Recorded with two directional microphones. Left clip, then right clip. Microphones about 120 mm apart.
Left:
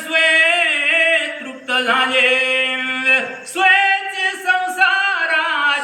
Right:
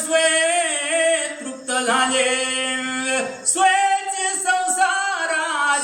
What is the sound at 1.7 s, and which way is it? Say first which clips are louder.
Chant: left 3 dB; 40° right (ahead or behind).